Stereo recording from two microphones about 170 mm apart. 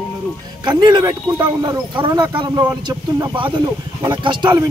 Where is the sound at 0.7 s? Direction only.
25° right (ahead or behind).